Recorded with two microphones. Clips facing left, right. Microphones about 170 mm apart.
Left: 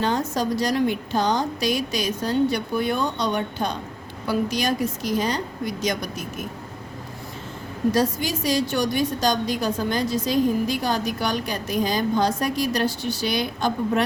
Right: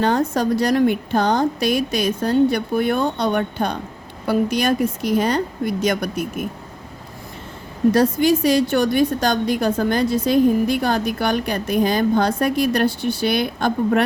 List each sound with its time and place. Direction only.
0.0 s a woman's voice: 60° right (ahead or behind)
7.9 s a woman's voice: 60° right (ahead or behind)